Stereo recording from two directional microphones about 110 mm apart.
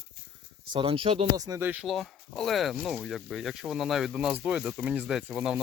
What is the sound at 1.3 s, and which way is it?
Speech, 30° right (ahead or behind).